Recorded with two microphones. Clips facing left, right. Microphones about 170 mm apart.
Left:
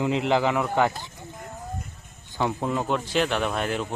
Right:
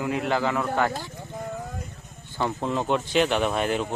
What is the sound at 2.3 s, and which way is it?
Speech, 10° left (ahead or behind).